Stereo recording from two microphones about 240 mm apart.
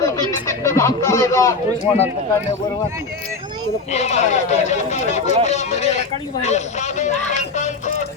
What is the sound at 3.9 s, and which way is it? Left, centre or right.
Speech, left.